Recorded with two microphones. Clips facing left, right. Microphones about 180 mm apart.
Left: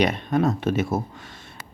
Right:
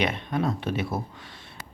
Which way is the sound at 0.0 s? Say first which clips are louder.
Left 5 dB; 40° left (ahead or behind).